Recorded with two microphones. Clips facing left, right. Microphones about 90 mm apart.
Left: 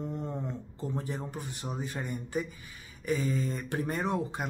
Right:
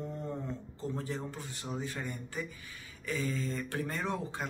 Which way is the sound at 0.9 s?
20° left (ahead or behind).